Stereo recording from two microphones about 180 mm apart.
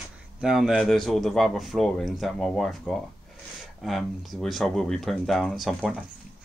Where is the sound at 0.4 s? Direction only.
Centre (ahead or behind).